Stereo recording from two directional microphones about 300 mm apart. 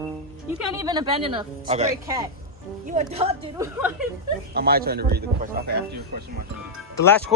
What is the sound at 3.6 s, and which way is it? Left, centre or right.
Speech, centre.